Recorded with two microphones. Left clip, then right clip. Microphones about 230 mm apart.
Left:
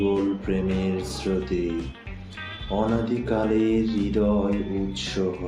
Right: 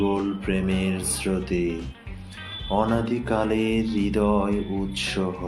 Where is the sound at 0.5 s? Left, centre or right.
Right.